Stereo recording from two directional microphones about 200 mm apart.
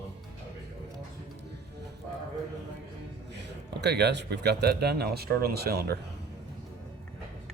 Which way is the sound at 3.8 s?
55° right (ahead or behind).